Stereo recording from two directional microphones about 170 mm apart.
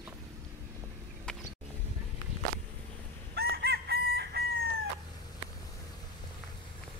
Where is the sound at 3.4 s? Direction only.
70° right (ahead or behind).